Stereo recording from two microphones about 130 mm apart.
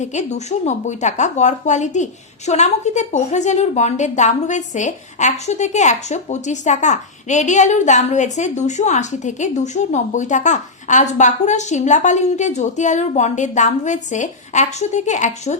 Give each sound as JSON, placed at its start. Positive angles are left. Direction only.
{"t": 0.0, "sound": "a woman's voice", "side_deg": 65}